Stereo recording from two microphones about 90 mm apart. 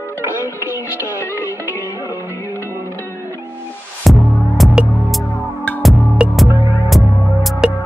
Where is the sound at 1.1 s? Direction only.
25° left (ahead or behind).